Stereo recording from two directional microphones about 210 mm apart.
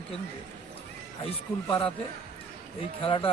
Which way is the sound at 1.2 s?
25° left (ahead or behind).